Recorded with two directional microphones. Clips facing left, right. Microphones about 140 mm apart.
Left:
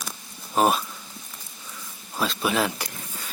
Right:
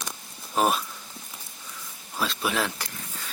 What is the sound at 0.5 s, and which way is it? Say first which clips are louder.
Speech: left 3 dB; centre (ahead or behind).